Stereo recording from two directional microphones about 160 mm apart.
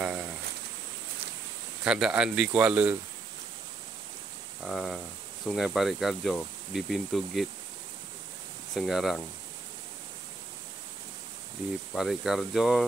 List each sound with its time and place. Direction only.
0.0 s a sound: 5° right (ahead or behind)
1.9 s speech: 5° right (ahead or behind)
4.6 s speech: centre (ahead or behind)
8.7 s speech: centre (ahead or behind)
11.9 s speech: centre (ahead or behind)